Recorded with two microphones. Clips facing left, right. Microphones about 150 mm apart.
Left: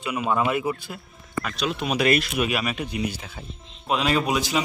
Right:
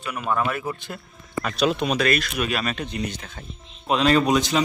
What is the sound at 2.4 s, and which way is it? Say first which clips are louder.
Speech: even; 15° left (ahead or behind).